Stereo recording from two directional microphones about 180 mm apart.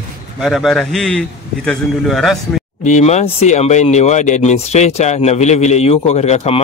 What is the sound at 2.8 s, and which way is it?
Speech, 40° left (ahead or behind).